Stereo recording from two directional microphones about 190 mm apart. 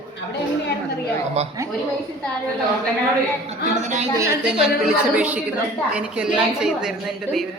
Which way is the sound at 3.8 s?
40° right (ahead or behind).